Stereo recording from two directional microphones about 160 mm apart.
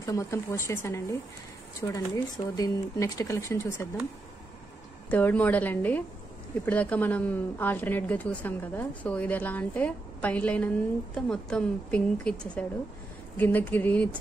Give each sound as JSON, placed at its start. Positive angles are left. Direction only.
{"t": 0.0, "sound": "a woman's voice", "side_deg": 20}
{"t": 5.1, "sound": "a woman's voice", "side_deg": 10}